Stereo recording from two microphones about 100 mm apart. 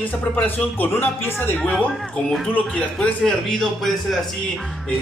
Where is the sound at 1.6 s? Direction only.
10° left (ahead or behind).